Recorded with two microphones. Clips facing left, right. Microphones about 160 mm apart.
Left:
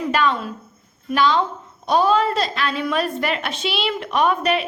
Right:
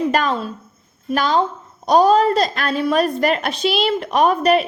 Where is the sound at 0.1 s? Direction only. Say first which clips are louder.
Right 1 dB; 40° right (ahead or behind).